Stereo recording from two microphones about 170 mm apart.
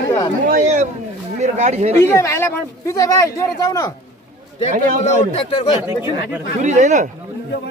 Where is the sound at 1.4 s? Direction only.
40° right (ahead or behind).